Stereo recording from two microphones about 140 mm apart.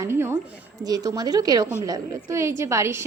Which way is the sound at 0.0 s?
20° right (ahead or behind).